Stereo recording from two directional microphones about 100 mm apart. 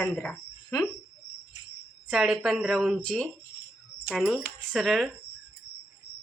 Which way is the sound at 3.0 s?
5° left (ahead or behind).